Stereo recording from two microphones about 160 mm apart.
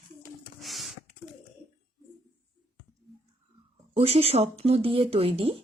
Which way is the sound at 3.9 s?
40° right (ahead or behind).